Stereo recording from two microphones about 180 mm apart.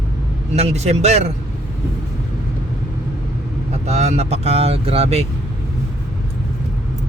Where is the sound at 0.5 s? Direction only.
35° right (ahead or behind).